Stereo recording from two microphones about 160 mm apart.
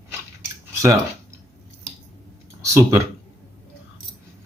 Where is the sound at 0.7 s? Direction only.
20° right (ahead or behind).